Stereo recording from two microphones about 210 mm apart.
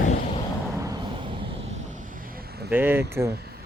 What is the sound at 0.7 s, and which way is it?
Vehicle, 15° right (ahead or behind).